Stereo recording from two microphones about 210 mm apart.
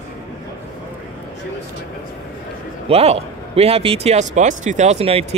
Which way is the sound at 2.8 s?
30° right (ahead or behind).